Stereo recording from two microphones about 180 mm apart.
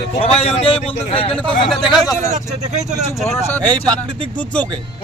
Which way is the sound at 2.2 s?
40° right (ahead or behind).